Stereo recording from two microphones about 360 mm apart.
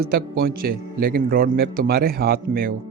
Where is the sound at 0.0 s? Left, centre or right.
Right.